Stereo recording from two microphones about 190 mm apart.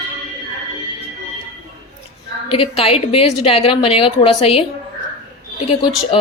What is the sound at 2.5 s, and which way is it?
Speech, 30° left (ahead or behind).